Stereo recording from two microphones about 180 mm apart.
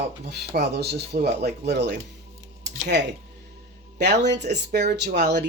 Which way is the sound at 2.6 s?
70° right (ahead or behind).